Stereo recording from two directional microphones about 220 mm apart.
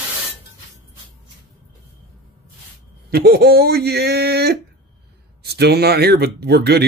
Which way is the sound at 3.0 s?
45° right (ahead or behind).